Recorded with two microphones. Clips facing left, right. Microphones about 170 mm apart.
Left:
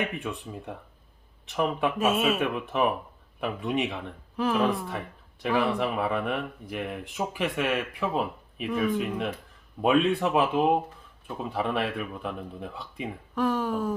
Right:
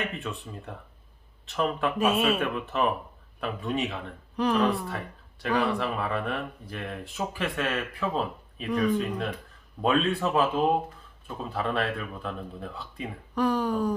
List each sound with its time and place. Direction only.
0.1 s speech: 15° left (ahead or behind)
2.0 s speech: centre (ahead or behind)
2.4 s speech: 15° left (ahead or behind)
4.4 s speech: 5° left (ahead or behind)
4.9 s speech: 15° left (ahead or behind)
13.3 s speech: centre (ahead or behind)